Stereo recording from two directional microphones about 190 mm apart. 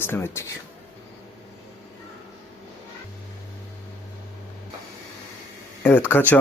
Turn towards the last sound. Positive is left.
turn(degrees=10)  # may be behind; listen again after turning